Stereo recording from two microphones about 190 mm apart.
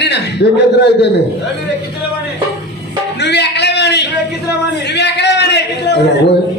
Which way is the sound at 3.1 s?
60° left (ahead or behind).